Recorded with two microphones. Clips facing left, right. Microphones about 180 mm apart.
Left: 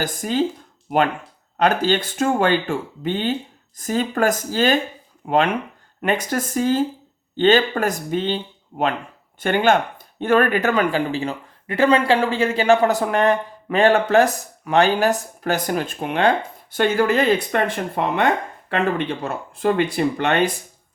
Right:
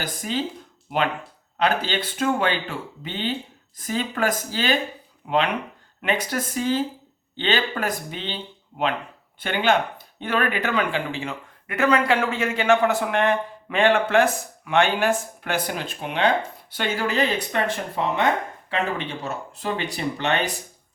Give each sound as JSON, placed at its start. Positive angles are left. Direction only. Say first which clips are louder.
{"t": 0.0, "sound": "speech", "louder": "left 6 dB", "side_deg": 45}
{"t": 1.5, "sound": "speech", "louder": "left 5 dB", "side_deg": 45}